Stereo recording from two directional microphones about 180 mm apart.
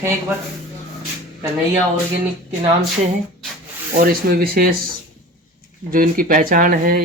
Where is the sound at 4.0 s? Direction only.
55° right (ahead or behind).